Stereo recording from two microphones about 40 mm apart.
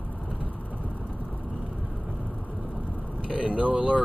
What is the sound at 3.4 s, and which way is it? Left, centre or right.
Speech, right.